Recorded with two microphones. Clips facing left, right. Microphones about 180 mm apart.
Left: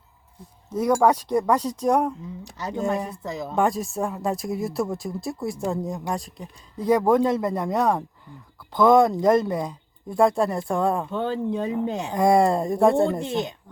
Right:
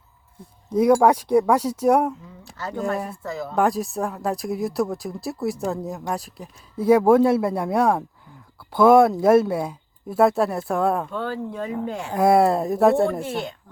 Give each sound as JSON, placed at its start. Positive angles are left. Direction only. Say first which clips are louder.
{"t": 0.7, "sound": "speech", "louder": "right 3 dB", "side_deg": -10}
{"t": 2.4, "sound": "speech", "louder": "even", "side_deg": 15}
{"t": 3.5, "sound": "speech", "louder": "right 2 dB", "side_deg": 0}
{"t": 11.1, "sound": "speech", "louder": "left 3 dB", "side_deg": 20}
{"t": 12.1, "sound": "speech", "louder": "right 2 dB", "side_deg": -5}
{"t": 13.1, "sound": "speech", "louder": "left 1 dB", "side_deg": 20}